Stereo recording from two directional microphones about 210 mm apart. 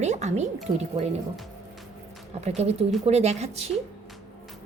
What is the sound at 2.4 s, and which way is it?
A woman's voice, 30° right (ahead or behind).